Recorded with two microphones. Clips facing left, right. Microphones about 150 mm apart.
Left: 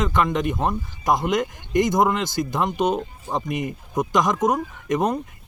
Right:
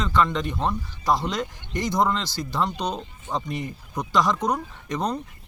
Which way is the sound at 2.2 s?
50° left (ahead or behind).